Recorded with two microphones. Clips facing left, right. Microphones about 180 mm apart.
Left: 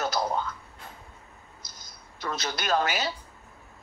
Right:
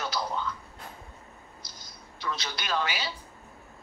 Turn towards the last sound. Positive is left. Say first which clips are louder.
# left 5 dB
turn(degrees=45)  # may be behind; listen again after turning